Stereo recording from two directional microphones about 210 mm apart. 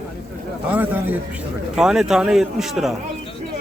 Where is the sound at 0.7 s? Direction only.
10° right (ahead or behind).